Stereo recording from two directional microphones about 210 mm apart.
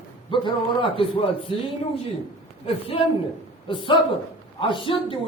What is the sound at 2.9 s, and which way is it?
A man's voice, 25° left (ahead or behind).